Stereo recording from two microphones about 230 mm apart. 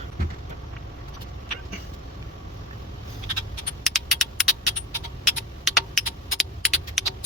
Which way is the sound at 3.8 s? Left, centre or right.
Centre.